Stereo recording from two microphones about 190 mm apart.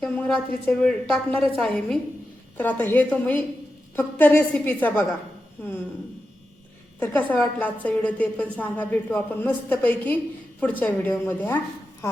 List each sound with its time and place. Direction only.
0.0 s a woman's voice: 5° left (ahead or behind)
7.0 s a woman's voice: 10° left (ahead or behind)